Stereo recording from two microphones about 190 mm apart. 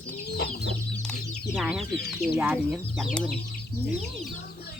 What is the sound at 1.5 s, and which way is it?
Speech, 5° right (ahead or behind).